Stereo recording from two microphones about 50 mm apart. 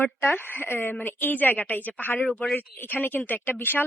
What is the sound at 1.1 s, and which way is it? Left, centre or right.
A woman's voice, left.